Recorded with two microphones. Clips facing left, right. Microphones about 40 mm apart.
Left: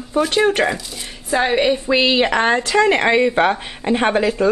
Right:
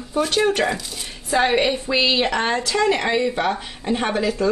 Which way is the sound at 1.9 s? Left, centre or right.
Left.